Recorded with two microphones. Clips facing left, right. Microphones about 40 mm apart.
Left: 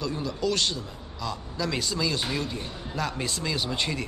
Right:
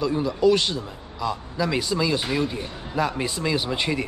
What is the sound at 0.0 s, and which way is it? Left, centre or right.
A man's voice, centre.